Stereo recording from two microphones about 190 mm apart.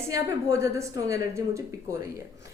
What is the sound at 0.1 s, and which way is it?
A woman's voice, 15° right (ahead or behind).